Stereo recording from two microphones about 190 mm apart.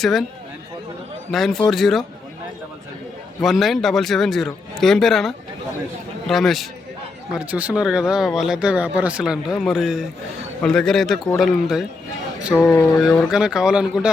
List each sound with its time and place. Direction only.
0.0 s speech: centre (ahead or behind)
1.3 s speech: centre (ahead or behind)
3.4 s speech: centre (ahead or behind)
12.5 s speech: 10° left (ahead or behind)
13.1 s speech: centre (ahead or behind)